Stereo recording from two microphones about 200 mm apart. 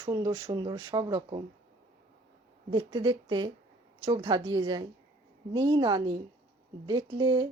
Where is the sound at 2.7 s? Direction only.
20° right (ahead or behind).